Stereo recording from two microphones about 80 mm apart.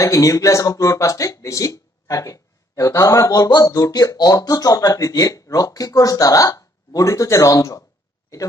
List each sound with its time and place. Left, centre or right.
0.0 s speech: left